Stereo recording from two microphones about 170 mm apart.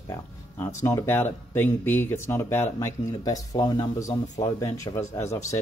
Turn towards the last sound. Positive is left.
turn(degrees=15)  # may be behind; listen again after turning